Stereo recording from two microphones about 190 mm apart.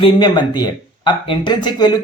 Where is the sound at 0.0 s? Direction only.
25° left (ahead or behind).